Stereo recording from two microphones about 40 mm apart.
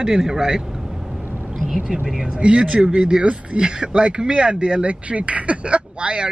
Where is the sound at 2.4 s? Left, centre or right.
Right.